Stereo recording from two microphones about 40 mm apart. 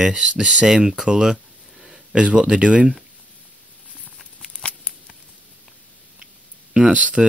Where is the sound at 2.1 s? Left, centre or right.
Right.